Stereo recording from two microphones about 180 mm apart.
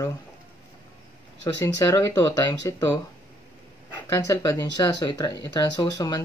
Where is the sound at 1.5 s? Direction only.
20° left (ahead or behind).